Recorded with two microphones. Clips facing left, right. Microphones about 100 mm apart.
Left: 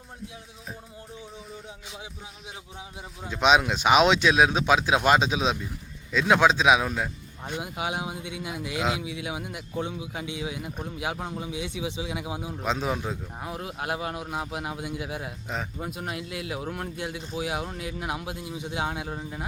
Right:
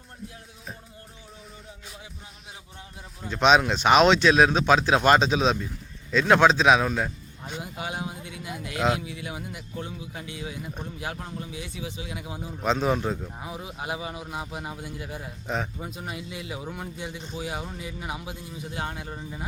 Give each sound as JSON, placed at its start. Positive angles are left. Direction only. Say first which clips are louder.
{"t": 3.2, "sound": "a man's voice", "louder": "right 2 dB", "side_deg": 5}
{"t": 14.8, "sound": "a man's voice", "louder": "left 4 dB", "side_deg": 85}
{"t": 15.1, "sound": "a man's voice", "louder": "right 2 dB", "side_deg": 5}